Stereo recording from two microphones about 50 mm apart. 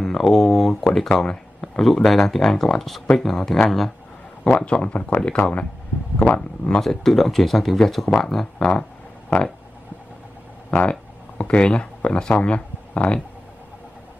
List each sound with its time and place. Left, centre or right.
0.0 s speech: centre
4.5 s speech: centre
5.1 s speech: left
6.7 s speech: centre
10.7 s speech: left